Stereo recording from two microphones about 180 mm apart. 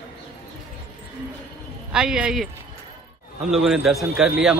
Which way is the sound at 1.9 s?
5° right (ahead or behind).